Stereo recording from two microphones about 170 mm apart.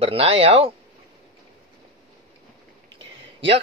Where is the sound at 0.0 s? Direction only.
35° right (ahead or behind).